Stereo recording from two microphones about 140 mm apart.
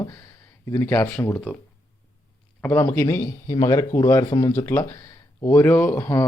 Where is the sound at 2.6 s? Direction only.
15° left (ahead or behind).